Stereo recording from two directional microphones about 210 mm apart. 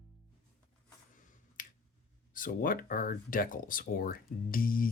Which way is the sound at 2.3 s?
40° left (ahead or behind).